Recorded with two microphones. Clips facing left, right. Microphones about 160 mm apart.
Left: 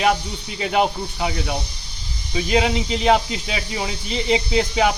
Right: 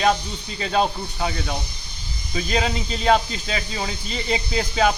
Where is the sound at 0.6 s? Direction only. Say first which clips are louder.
Left 2 dB; 15° left (ahead or behind).